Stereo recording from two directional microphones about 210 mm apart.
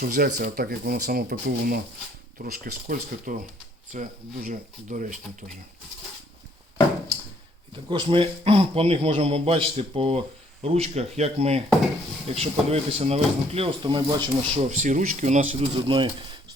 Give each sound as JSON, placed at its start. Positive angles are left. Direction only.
{"t": 0.0, "sound": "speech", "side_deg": -45}
{"t": 7.9, "sound": "speech", "side_deg": -20}